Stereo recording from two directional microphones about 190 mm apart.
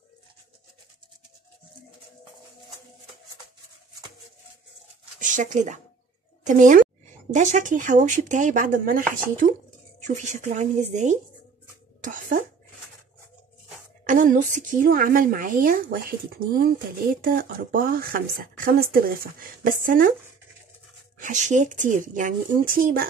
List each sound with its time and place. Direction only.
5.2 s a woman's voice: 40° right (ahead or behind)
12.0 s a sound: 45° right (ahead or behind)
14.0 s a woman's voice: 45° right (ahead or behind)
21.2 s a woman's voice: 40° right (ahead or behind)